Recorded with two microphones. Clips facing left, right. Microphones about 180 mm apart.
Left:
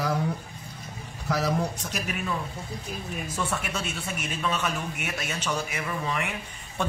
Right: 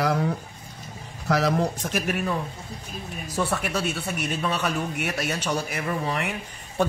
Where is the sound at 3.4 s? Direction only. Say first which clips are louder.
Right 6 dB; 35° right (ahead or behind).